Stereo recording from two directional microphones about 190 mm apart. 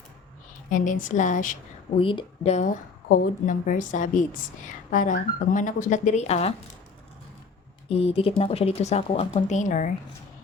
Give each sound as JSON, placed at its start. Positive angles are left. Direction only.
{"t": 0.7, "sound": "a woman's voice", "side_deg": 45}
{"t": 2.0, "sound": "a woman's voice", "side_deg": 25}
{"t": 7.9, "sound": "speech", "side_deg": 30}